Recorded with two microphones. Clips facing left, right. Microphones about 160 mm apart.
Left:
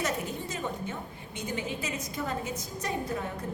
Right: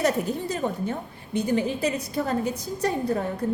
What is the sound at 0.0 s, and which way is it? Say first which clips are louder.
A woman's voice: right 8 dB; 35° right (ahead or behind).